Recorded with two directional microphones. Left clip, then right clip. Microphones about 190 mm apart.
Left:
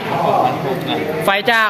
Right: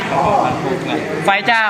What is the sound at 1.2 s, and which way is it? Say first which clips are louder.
Speech: right 1 dB; 50° left (ahead or behind).